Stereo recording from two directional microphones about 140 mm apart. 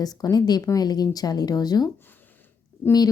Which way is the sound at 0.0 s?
25° left (ahead or behind).